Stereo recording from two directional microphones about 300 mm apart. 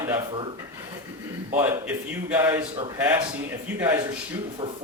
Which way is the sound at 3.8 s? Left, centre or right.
Centre.